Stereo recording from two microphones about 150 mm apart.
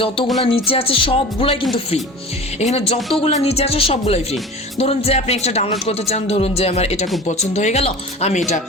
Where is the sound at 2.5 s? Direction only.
45° left (ahead or behind).